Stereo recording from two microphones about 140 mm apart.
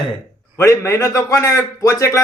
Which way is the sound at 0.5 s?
20° left (ahead or behind).